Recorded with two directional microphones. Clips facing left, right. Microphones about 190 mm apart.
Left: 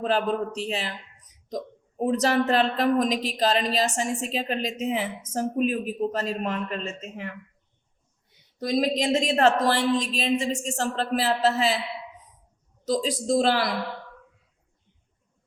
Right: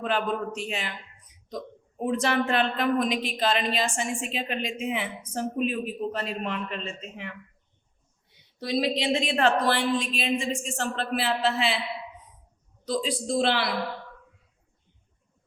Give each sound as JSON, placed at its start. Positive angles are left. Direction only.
{"t": 0.0, "sound": "a woman's voice", "side_deg": 35}
{"t": 8.5, "sound": "a woman's voice", "side_deg": 45}
{"t": 12.8, "sound": "a woman's voice", "side_deg": 40}